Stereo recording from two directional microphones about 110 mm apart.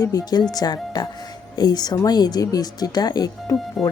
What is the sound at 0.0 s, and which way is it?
Speech, 35° left (ahead or behind).